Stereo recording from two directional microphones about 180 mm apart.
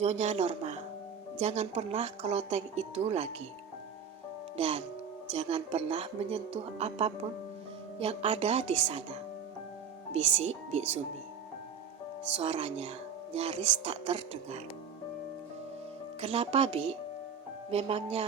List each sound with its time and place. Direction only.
0.0 s speech: 40° right (ahead or behind)
4.5 s speech: 35° right (ahead or behind)
12.4 s speech: 35° right (ahead or behind)
16.2 s speech: 35° right (ahead or behind)